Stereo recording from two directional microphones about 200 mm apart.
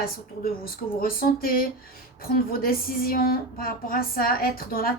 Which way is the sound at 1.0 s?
45° left (ahead or behind).